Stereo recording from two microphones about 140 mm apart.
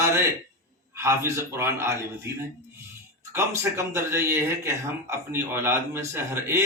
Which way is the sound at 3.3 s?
20° right (ahead or behind).